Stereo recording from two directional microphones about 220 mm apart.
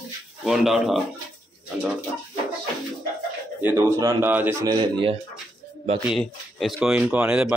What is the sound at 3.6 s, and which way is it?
A man's voice, 10° right (ahead or behind).